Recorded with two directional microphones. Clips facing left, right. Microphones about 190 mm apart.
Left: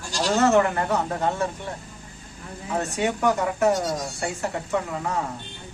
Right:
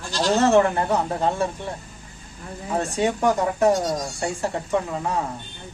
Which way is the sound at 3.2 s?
15° right (ahead or behind).